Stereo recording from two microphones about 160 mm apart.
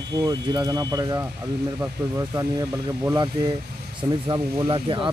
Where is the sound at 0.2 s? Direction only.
25° right (ahead or behind).